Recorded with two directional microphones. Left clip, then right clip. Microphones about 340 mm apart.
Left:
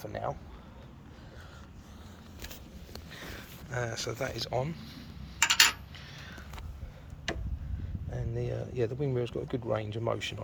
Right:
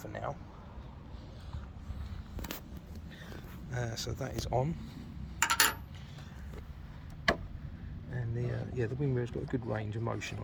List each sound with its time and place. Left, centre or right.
0.0 s a sound: left
3.7 s speech: centre
5.5 s coin: right
8.1 s speech: centre